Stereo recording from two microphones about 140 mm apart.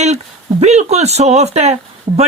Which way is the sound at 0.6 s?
55° right (ahead or behind).